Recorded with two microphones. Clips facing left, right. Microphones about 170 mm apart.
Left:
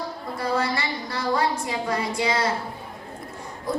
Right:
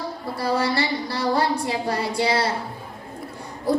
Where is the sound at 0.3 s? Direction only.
30° right (ahead or behind).